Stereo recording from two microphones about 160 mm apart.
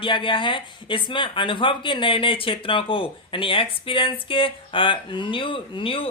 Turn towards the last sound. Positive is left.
turn(degrees=35)  # may be behind; listen again after turning